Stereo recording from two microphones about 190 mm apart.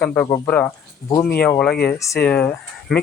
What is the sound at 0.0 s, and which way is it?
Speech, 10° left (ahead or behind).